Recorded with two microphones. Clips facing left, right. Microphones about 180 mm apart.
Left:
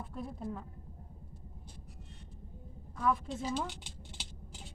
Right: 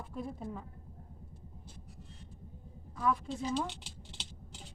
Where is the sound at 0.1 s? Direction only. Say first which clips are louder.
Right 2 dB; centre (ahead or behind).